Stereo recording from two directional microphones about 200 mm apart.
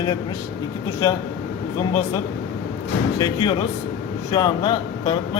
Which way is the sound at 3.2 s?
20° left (ahead or behind).